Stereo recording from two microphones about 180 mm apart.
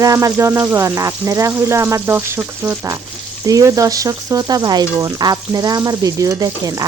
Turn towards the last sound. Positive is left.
turn(degrees=-20)  # may be behind; listen again after turning